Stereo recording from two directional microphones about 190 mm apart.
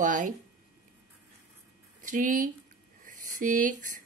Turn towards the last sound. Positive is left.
turn(degrees=-45)  # may be behind; listen again after turning